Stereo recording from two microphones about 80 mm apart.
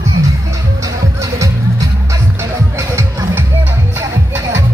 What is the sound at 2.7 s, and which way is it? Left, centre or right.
Music, right.